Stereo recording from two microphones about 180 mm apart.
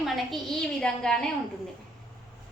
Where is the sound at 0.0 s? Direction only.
Centre (ahead or behind).